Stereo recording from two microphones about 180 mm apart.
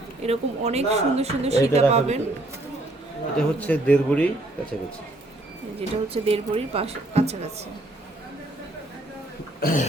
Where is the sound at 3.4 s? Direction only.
10° left (ahead or behind).